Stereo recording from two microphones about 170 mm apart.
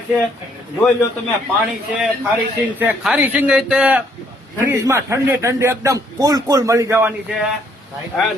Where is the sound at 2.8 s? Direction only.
10° right (ahead or behind).